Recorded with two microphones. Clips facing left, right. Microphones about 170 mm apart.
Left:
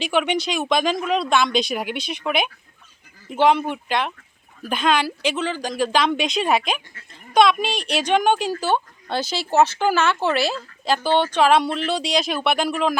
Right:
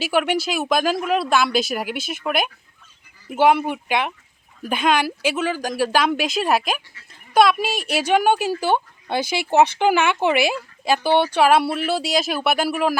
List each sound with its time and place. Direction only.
0.0 s a woman's voice: 5° right (ahead or behind)